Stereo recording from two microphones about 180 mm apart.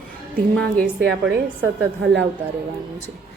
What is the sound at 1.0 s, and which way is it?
Speech, 70° right (ahead or behind).